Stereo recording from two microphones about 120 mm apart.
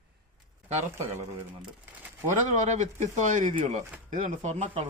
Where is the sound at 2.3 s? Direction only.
90° right.